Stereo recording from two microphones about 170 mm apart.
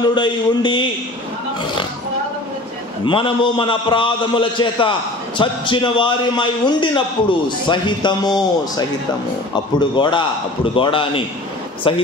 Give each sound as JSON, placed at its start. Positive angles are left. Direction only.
{"t": 0.0, "sound": "a man's voice", "side_deg": 25}
{"t": 3.1, "sound": "a man's voice", "side_deg": 30}